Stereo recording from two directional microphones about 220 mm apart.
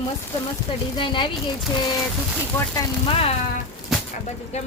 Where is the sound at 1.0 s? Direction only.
20° left (ahead or behind).